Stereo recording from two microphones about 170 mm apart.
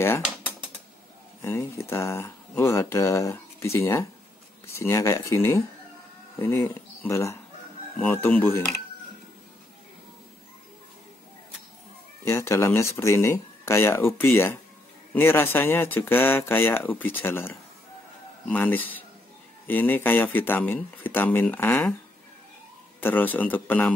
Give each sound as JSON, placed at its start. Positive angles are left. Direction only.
{"t": 1.4, "sound": "speech", "side_deg": 15}
{"t": 12.3, "sound": "speech", "side_deg": 15}
{"t": 22.9, "sound": "speech", "side_deg": 10}